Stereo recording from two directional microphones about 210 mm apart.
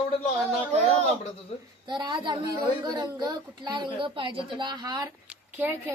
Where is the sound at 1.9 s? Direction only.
20° right (ahead or behind).